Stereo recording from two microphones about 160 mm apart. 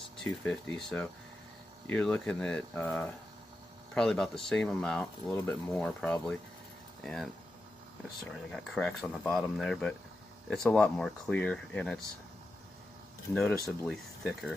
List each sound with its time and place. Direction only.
0.2 s speech: 5° left (ahead or behind)
8.3 s speech: 5° left (ahead or behind)
13.3 s speech: 5° left (ahead or behind)